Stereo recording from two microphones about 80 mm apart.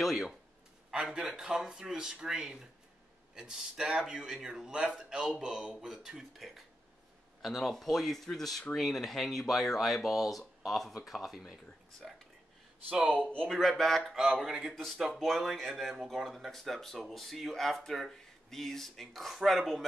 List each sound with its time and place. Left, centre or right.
0.0 s speech: centre
13.2 s speech: right
13.5 s speech: centre